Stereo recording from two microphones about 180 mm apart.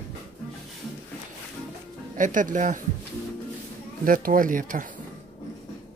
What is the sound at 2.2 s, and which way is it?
Speech, 45° right (ahead or behind).